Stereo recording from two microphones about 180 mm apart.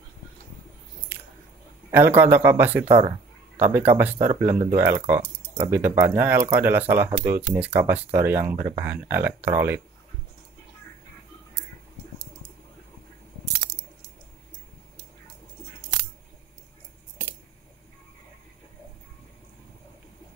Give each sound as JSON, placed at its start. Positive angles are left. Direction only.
{"t": 1.9, "sound": "speech", "side_deg": -10}
{"t": 2.9, "sound": "speech", "side_deg": -25}
{"t": 3.5, "sound": "speech", "side_deg": -10}